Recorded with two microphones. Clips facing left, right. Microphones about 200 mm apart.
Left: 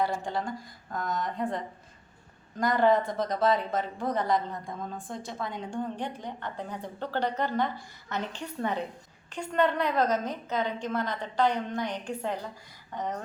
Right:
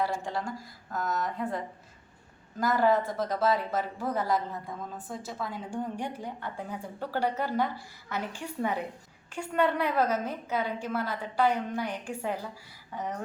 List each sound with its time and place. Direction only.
0.0 s a woman's voice: centre (ahead or behind)